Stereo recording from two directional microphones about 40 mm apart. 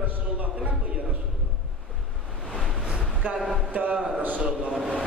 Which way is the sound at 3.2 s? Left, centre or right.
Right.